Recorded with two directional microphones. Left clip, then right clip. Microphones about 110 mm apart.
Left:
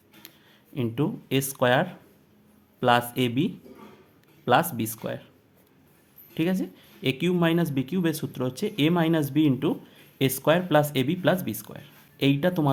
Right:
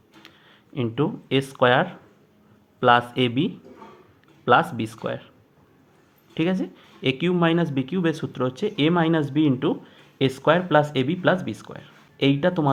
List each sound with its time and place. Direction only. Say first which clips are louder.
0.2 s speech: right 3 dB; 35° left (ahead or behind)
6.3 s speech: right 3 dB; 30° left (ahead or behind)